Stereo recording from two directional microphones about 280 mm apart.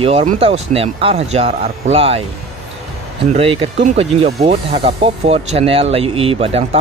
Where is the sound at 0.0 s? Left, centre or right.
Right.